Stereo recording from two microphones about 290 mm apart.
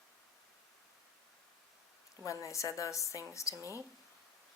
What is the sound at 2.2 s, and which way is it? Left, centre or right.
A woman's voice, centre.